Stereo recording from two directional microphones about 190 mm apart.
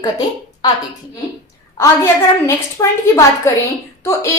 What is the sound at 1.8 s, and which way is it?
A woman's voice, 15° left (ahead or behind).